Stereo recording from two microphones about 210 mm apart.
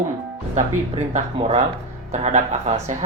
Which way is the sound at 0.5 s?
35° right (ahead or behind).